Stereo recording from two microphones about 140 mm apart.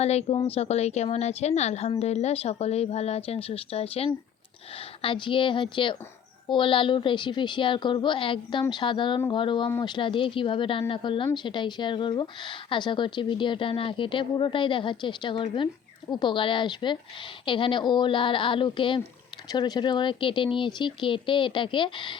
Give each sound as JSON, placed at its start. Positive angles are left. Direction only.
{"t": 0.0, "sound": "a woman's voice", "side_deg": 50}